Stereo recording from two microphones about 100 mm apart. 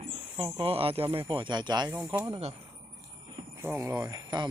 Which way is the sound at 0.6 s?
70° right (ahead or behind).